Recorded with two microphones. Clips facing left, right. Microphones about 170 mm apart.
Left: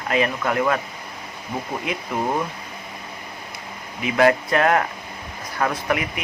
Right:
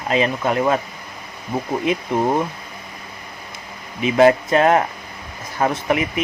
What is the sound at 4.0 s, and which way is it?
Speech, 25° right (ahead or behind).